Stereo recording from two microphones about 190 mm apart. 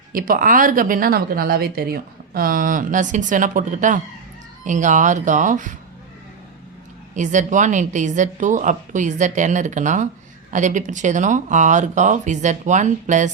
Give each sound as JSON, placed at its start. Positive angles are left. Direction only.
{"t": 0.1, "sound": "a woman's voice", "side_deg": -45}
{"t": 7.2, "sound": "a woman's voice", "side_deg": -40}